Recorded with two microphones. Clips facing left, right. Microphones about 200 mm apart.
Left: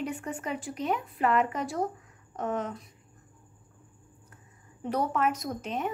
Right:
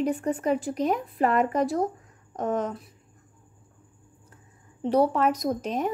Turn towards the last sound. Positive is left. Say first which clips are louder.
# right 6 dB
turn(degrees=-40)  # may be behind; listen again after turning